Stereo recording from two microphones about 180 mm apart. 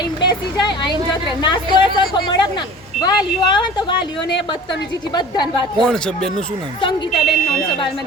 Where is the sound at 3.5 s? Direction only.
25° left (ahead or behind).